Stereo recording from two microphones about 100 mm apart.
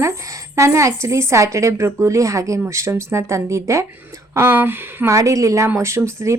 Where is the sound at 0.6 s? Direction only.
30° right (ahead or behind).